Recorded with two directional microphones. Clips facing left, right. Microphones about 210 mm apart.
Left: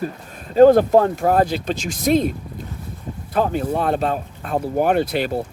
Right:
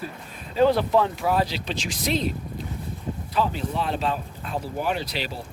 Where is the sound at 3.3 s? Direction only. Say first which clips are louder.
Left 6 dB; 50° left (ahead or behind).